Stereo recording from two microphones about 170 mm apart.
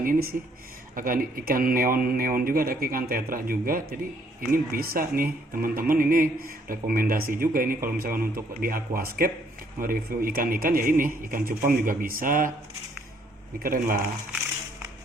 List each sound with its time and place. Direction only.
0.0 s speech: 60° right (ahead or behind)
13.6 s speech: 55° right (ahead or behind)